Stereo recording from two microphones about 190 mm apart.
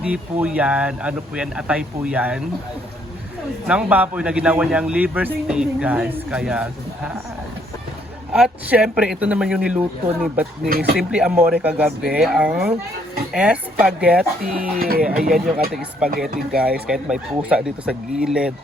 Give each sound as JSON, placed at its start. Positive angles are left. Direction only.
{"t": 0.0, "sound": "a man's voice", "side_deg": -5}
{"t": 3.7, "sound": "a man's voice", "side_deg": -5}
{"t": 8.3, "sound": "a man's voice", "side_deg": -5}
{"t": 10.7, "sound": "speech", "side_deg": -55}
{"t": 10.9, "sound": "a man's voice", "side_deg": -5}
{"t": 14.8, "sound": "speech", "side_deg": -50}
{"t": 15.0, "sound": "a man's voice", "side_deg": -5}